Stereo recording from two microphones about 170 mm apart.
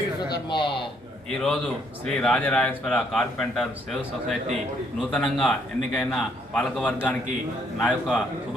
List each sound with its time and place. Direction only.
0.2 s a sound: 25° left (ahead or behind)
1.4 s speech: centre (ahead or behind)
5.1 s speech: 5° left (ahead or behind)